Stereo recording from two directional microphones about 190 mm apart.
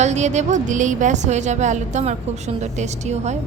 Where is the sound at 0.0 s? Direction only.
35° right (ahead or behind).